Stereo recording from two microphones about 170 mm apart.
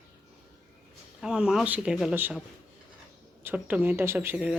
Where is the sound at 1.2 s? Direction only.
5° right (ahead or behind).